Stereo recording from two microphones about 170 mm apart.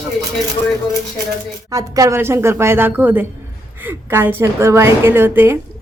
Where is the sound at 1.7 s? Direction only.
20° right (ahead or behind).